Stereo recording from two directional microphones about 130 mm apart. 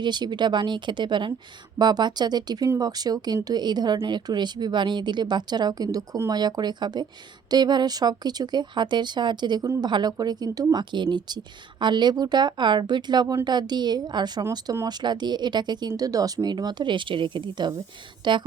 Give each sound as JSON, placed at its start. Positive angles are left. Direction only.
{"t": 0.0, "sound": "speech", "side_deg": -35}